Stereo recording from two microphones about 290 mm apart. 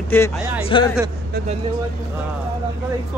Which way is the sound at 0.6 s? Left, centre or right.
Centre.